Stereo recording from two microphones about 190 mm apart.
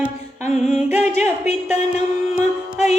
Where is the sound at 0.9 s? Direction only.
35° left (ahead or behind).